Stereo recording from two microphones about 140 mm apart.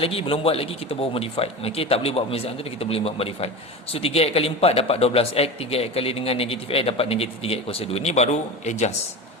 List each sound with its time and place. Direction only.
0.0 s a man's voice: 40° left (ahead or behind)